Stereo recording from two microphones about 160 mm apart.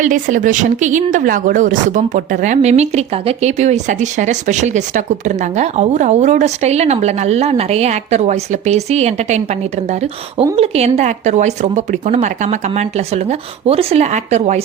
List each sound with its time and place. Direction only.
0.0 s speech: 55° right (ahead or behind)